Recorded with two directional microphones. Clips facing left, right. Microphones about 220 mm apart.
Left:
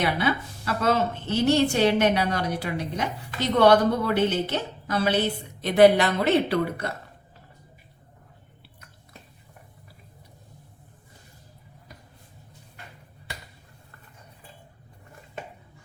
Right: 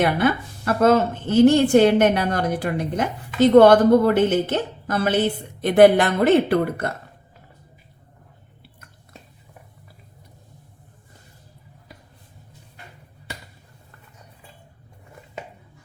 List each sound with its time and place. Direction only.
0.0 s a woman's voice: 50° right (ahead or behind)